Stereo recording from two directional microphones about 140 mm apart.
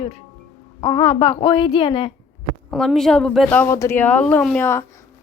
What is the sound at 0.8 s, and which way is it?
A woman's voice, 40° left (ahead or behind).